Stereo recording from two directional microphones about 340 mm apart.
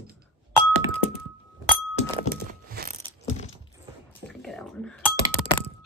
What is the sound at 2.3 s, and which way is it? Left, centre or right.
Music, right.